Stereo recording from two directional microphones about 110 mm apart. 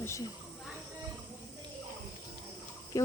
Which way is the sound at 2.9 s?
30° left (ahead or behind).